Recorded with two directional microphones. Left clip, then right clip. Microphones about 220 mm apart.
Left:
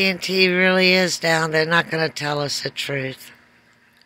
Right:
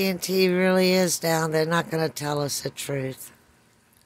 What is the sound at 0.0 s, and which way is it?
Speech, 10° right (ahead or behind).